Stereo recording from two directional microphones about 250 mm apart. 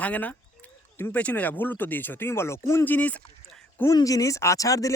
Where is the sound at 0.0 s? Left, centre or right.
Centre.